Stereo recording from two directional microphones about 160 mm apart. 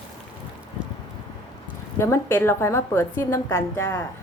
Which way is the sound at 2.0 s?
15° left (ahead or behind).